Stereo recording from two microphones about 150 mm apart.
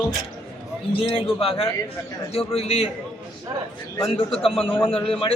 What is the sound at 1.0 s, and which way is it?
A man's voice, 35° left (ahead or behind).